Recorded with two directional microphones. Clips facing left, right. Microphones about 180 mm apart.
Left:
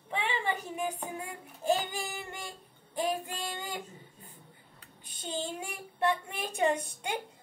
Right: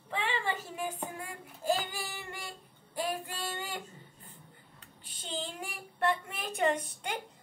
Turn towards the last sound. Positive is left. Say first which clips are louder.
# left 2 dB
turn(degrees=10)  # may be behind; listen again after turning